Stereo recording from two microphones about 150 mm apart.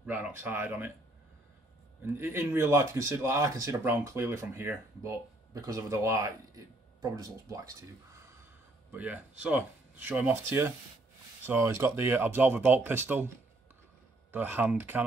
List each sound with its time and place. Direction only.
0.0 s speech: 10° right (ahead or behind)
2.0 s speech: 15° right (ahead or behind)
8.9 s speech: 10° right (ahead or behind)
14.3 s speech: 10° right (ahead or behind)